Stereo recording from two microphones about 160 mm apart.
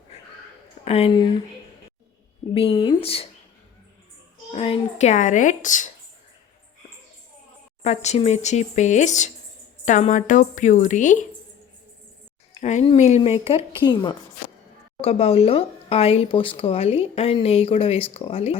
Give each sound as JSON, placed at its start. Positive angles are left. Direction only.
{"t": 0.9, "sound": "speech", "side_deg": 40}
{"t": 1.1, "sound": "speech", "side_deg": 30}
{"t": 2.5, "sound": "speech", "side_deg": 35}
{"t": 4.5, "sound": "speech", "side_deg": 35}
{"t": 7.8, "sound": "speech", "side_deg": 45}
{"t": 12.5, "sound": "speech", "side_deg": 40}
{"t": 13.8, "sound": "speech", "side_deg": 25}
{"t": 15.0, "sound": "speech", "side_deg": 40}